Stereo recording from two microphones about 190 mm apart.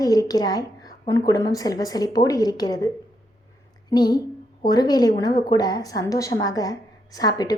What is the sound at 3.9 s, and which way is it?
A woman's voice, 20° left (ahead or behind).